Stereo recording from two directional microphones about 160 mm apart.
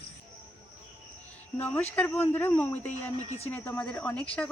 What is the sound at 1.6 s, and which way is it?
Speech, 10° left (ahead or behind).